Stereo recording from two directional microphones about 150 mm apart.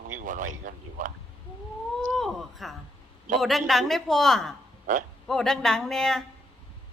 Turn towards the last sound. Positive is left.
turn(degrees=5)  # may be behind; listen again after turning